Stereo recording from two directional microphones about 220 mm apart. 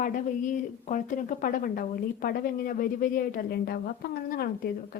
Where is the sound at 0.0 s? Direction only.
35° left (ahead or behind).